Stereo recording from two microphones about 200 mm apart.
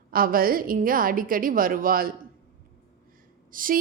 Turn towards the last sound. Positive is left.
turn(degrees=-45)  # may be behind; listen again after turning